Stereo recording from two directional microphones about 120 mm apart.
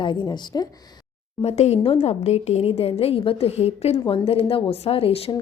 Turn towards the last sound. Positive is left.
turn(degrees=55)  # may be behind; listen again after turning